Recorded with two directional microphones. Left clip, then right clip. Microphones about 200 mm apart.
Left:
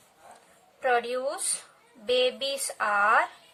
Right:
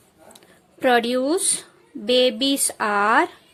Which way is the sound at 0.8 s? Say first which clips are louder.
Right 7 dB; 40° right (ahead or behind).